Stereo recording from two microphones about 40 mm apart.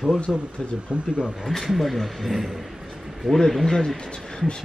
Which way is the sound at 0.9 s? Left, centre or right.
Right.